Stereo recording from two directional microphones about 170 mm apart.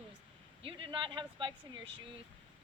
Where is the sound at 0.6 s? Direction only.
30° right (ahead or behind).